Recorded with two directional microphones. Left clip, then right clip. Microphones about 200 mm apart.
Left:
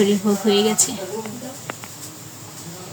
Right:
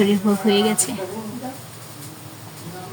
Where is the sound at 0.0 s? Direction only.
Centre (ahead or behind).